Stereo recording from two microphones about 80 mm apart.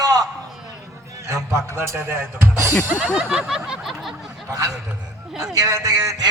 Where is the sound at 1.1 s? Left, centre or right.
Right.